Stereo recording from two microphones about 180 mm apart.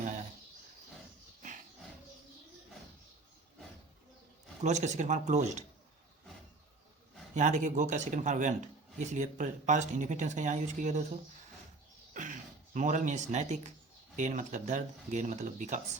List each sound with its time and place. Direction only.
0.0 s a sound: 45° right (ahead or behind)
4.6 s speech: 40° right (ahead or behind)
7.3 s speech: 45° right (ahead or behind)
12.1 s speech: 45° right (ahead or behind)